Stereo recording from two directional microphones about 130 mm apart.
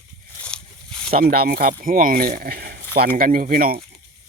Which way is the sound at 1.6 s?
90° right.